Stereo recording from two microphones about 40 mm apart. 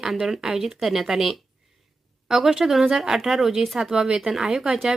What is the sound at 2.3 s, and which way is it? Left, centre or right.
A woman's voice, centre.